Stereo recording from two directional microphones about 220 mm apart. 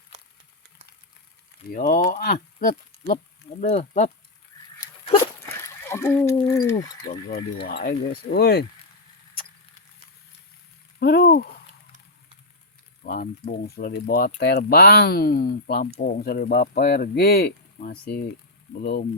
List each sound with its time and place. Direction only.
1.7 s speech: 40° left (ahead or behind)
5.6 s speech: 10° left (ahead or behind)
7.1 s speech: 45° left (ahead or behind)
11.0 s speech: 45° left (ahead or behind)
13.1 s speech: 40° left (ahead or behind)